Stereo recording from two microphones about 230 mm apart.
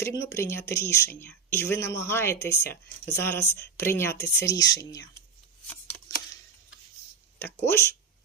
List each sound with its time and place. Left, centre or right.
0.0 s speech: centre
7.3 s speech: centre